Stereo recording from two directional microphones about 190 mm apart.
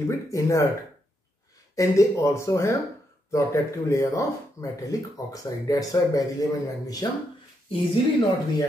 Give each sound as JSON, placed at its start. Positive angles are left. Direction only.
{"t": 0.1, "sound": "speech", "side_deg": 15}
{"t": 1.8, "sound": "speech", "side_deg": 15}